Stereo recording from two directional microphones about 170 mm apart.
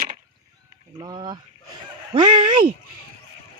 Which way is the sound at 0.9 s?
25° right (ahead or behind).